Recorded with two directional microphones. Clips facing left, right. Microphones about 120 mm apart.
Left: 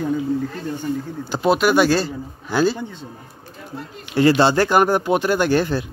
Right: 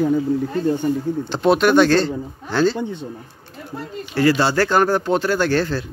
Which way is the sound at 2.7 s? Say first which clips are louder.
Right 5 dB; 20° right (ahead or behind).